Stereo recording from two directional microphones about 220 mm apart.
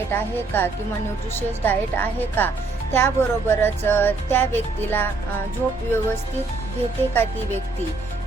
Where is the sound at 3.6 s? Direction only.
10° left (ahead or behind).